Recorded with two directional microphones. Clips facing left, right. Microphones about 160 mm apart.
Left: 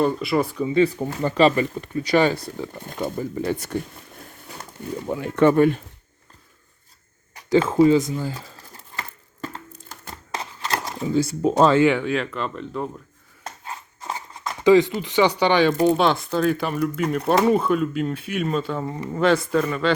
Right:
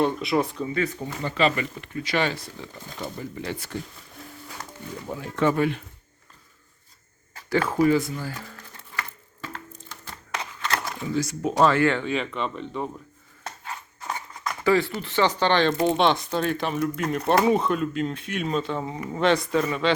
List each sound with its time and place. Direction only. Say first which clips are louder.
0.0 s speech: left 2 dB; centre (ahead or behind)
0.7 s speech: left 8 dB; 30° left (ahead or behind)
2.7 s speech: left 6 dB; 55° left (ahead or behind)
5.0 s speech: left 6 dB; 70° left (ahead or behind); by 5.8 s 50° left (ahead or behind)
7.3 s speech: left 6 dB; 20° left (ahead or behind)
8.7 s a sound: left 1 dB; 35° left (ahead or behind)
11.8 s speech: left 4 dB; 10° left (ahead or behind)
14.1 s speech: left 1 dB; 25° left (ahead or behind); by 19.9 s centre (ahead or behind)